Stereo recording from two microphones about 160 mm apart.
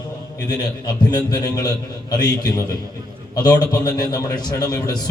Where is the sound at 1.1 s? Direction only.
25° left (ahead or behind).